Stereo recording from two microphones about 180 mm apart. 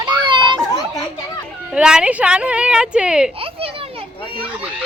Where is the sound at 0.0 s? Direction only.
25° right (ahead or behind).